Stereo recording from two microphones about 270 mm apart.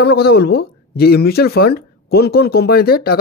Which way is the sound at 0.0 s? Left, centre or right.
Left.